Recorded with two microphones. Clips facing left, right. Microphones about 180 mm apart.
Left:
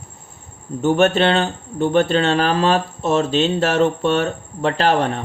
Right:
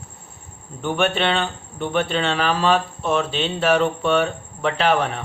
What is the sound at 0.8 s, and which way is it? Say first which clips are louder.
Speech: left 6 dB; 40° left (ahead or behind).